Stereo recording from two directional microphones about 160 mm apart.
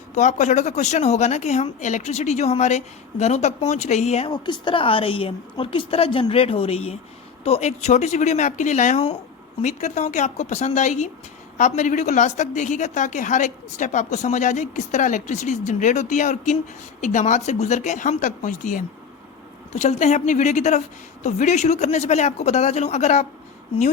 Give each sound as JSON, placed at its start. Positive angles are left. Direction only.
{"t": 0.2, "sound": "a woman's voice", "side_deg": 50}
{"t": 4.3, "sound": "a woman's voice", "side_deg": 30}